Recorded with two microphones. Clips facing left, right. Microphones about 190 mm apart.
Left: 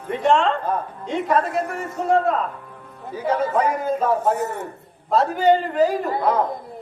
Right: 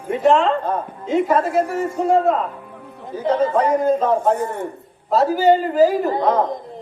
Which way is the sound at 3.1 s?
10° left (ahead or behind).